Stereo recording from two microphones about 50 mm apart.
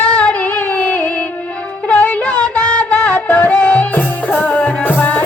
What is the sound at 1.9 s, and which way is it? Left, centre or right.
Music, left.